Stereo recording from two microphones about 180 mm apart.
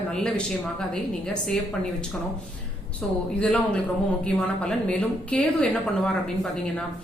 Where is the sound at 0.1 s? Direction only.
5° left (ahead or behind).